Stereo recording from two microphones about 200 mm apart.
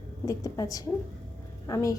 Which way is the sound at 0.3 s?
15° left (ahead or behind).